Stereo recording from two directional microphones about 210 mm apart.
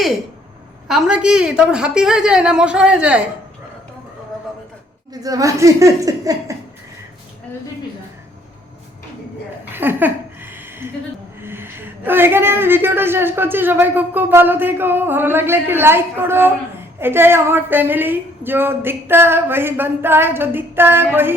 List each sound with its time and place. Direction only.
0.9 s a woman's voice: 5° right (ahead or behind)
5.1 s a woman's voice: 15° right (ahead or behind)
9.7 s a sound: 10° right (ahead or behind)
11.4 s a woman's voice: 10° right (ahead or behind)